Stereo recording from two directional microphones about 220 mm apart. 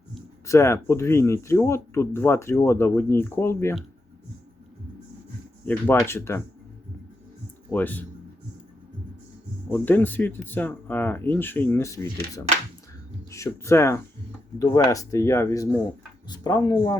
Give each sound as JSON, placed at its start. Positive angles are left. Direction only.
{"t": 0.4, "sound": "speech", "side_deg": 15}
{"t": 5.6, "sound": "speech", "side_deg": 10}
{"t": 7.7, "sound": "speech", "side_deg": 10}
{"t": 9.6, "sound": "speech", "side_deg": 10}